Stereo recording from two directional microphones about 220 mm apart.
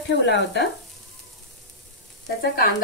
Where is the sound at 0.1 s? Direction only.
50° left (ahead or behind).